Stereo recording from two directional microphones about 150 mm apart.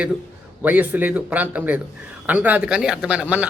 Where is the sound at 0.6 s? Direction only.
10° right (ahead or behind).